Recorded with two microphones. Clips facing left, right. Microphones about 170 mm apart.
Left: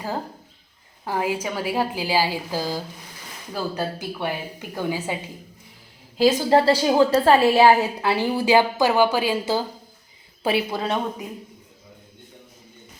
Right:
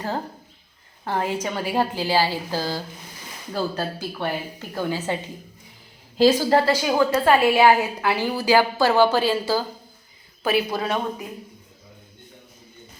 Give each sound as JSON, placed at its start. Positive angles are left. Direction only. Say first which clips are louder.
{"t": 1.0, "sound": "a woman's voice", "louder": "even", "side_deg": 5}
{"t": 6.4, "sound": "a woman's voice", "louder": "left 2 dB", "side_deg": 25}
{"t": 10.4, "sound": "a woman's voice", "louder": "even", "side_deg": 30}